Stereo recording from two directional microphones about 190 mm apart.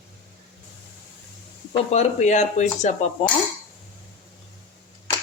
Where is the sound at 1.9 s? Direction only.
35° left (ahead or behind).